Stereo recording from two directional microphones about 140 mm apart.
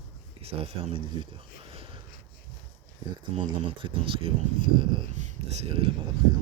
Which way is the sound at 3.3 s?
40° right (ahead or behind).